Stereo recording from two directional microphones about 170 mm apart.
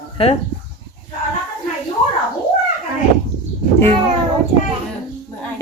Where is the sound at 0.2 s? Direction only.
35° left (ahead or behind).